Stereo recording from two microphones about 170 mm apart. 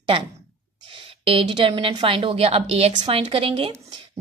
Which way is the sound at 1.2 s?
30° right (ahead or behind).